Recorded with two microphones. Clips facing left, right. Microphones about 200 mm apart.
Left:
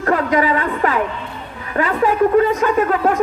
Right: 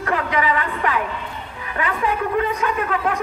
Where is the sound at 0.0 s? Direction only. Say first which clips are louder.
Left 5 dB; 45° left (ahead or behind).